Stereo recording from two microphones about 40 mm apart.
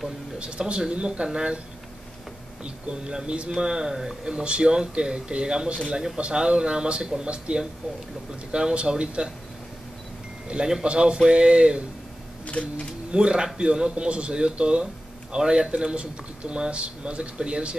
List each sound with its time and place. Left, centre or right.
0.4 s speech: right
2.6 s speech: right
10.5 s speech: right
12.4 s a sound: left
13.1 s speech: right